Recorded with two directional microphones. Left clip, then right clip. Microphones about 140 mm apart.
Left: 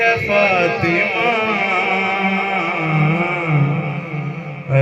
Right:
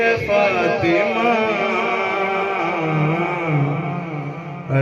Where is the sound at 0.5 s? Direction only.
55° right (ahead or behind).